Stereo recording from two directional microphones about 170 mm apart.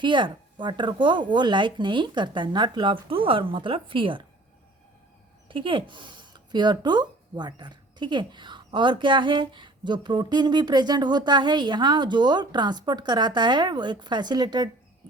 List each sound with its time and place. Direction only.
0.0 s speech: 25° right (ahead or behind)
5.5 s speech: 30° right (ahead or behind)